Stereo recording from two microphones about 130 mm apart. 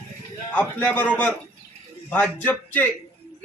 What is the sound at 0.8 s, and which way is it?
A man's voice, 10° left (ahead or behind).